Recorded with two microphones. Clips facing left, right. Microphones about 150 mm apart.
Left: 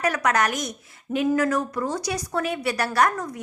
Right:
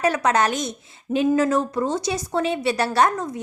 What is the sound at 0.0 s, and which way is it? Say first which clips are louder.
A woman's voice: right 3 dB; 25° right (ahead or behind).